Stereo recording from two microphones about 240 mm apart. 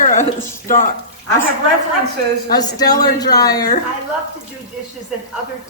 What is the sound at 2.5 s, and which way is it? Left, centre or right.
A child's voice, centre.